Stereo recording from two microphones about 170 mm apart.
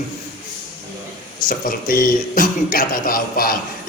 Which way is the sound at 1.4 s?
55° left (ahead or behind).